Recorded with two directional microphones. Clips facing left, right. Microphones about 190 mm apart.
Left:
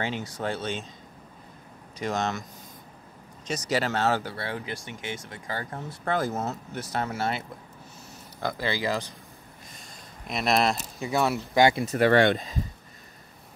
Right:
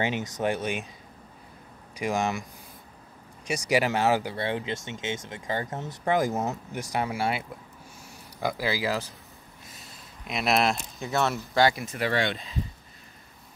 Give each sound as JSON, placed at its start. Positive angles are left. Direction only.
{"t": 0.0, "sound": "speech", "side_deg": -20}
{"t": 2.0, "sound": "speech", "side_deg": -10}
{"t": 3.4, "sound": "speech", "side_deg": -15}
{"t": 9.7, "sound": "a sound", "side_deg": -5}
{"t": 11.1, "sound": "speech", "side_deg": 10}
{"t": 11.7, "sound": "speech", "side_deg": 40}
{"t": 12.1, "sound": "speech", "side_deg": 55}